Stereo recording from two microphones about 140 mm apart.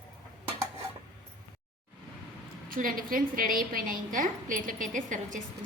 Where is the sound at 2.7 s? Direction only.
85° right.